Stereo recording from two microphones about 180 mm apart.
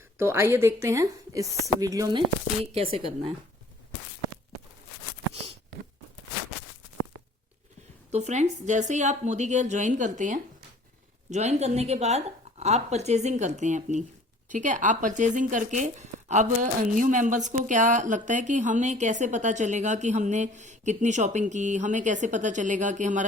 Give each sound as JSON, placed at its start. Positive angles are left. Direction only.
{"t": 0.2, "sound": "a woman's voice", "side_deg": -15}
{"t": 8.1, "sound": "a woman's voice", "side_deg": -40}